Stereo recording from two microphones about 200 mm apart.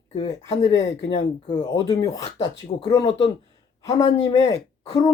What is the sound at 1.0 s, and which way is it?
Speech, 25° left (ahead or behind).